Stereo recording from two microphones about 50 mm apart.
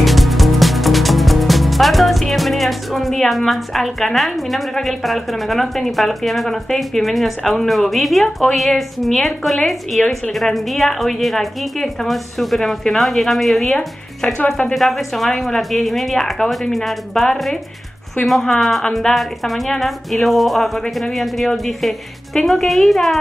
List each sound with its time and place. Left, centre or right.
0.0 s speech: centre
14.2 s speech: left
14.7 s speech: centre